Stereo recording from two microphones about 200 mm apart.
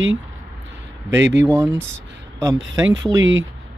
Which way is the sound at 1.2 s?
60° right (ahead or behind).